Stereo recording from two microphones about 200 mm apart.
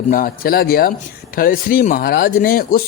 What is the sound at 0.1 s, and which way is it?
A man's voice, 45° left (ahead or behind).